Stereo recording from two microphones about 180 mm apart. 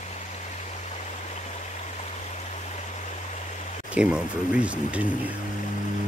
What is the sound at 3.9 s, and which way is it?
Speech, 5° right (ahead or behind).